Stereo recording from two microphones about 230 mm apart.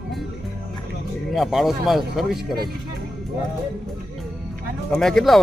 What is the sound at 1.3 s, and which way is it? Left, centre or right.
Speech, centre.